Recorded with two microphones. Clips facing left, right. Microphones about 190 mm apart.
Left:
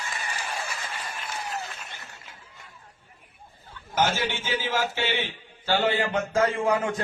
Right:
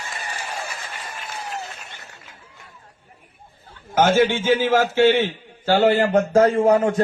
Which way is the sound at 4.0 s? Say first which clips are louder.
Right 9 dB; 50° right (ahead or behind).